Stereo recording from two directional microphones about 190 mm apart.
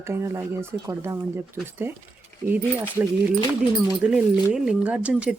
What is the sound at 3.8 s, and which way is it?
Speech, 5° right (ahead or behind).